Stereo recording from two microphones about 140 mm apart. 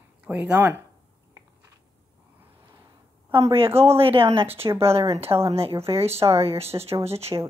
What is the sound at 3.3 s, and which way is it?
A woman's voice, 40° right (ahead or behind).